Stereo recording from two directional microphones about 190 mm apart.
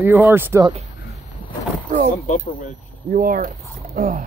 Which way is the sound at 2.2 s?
40° left (ahead or behind).